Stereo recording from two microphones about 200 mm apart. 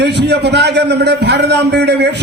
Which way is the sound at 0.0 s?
55° right (ahead or behind).